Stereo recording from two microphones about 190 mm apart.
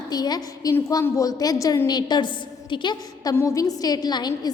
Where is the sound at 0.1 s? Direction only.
20° left (ahead or behind).